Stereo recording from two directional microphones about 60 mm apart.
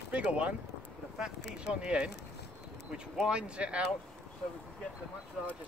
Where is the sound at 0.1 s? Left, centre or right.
Right.